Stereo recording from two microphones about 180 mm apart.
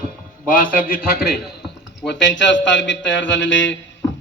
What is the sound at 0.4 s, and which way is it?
Speech, 50° left (ahead or behind).